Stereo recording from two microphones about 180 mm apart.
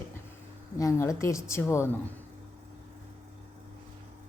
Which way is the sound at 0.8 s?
20° left (ahead or behind).